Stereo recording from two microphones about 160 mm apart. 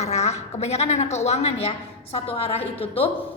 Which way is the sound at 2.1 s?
40° left (ahead or behind).